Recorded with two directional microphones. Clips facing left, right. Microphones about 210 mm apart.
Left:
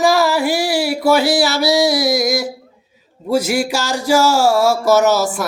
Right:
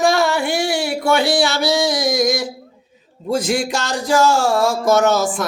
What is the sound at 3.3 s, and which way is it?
Speech, 5° left (ahead or behind).